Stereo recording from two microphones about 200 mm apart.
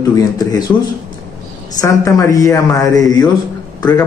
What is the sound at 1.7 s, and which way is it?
A man's voice, 15° left (ahead or behind).